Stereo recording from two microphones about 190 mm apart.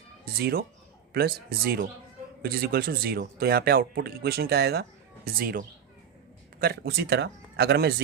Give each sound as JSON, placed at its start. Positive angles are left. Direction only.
{"t": 0.3, "sound": "speech", "side_deg": -55}